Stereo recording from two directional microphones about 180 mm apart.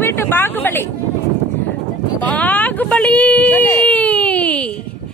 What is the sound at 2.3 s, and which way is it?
Speech, 10° left (ahead or behind).